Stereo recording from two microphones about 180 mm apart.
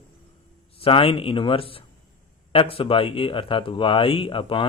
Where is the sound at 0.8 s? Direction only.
30° left (ahead or behind).